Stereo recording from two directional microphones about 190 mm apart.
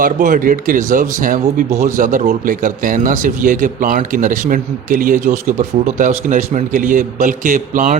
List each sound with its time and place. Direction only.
0.0 s speech: 45° right (ahead or behind)